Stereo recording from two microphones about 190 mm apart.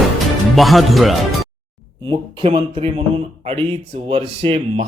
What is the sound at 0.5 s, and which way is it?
Speech, centre (ahead or behind).